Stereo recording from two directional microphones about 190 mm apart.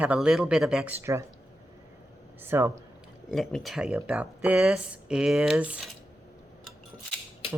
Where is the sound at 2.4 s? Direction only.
10° right (ahead or behind).